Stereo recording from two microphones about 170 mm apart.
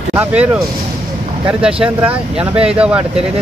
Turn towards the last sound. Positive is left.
turn(degrees=-5)  # may be behind; listen again after turning